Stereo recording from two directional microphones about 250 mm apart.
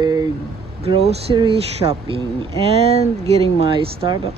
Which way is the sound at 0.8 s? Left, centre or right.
Right.